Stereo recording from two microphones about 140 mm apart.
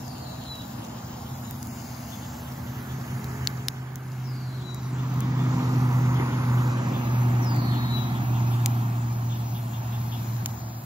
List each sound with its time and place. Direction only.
5.5 s vehicle: 25° right (ahead or behind)